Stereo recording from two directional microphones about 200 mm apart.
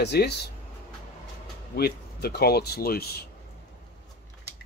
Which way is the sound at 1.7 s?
55° left (ahead or behind).